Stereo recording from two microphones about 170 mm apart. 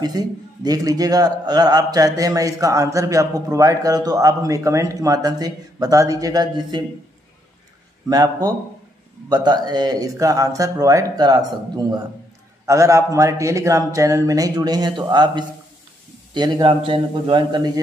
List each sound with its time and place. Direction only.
0.0 s a man's voice: 25° right (ahead or behind)
8.1 s a man's voice: 20° right (ahead or behind)